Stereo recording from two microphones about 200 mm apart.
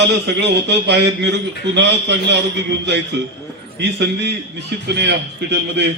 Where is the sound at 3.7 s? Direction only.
60° right (ahead or behind).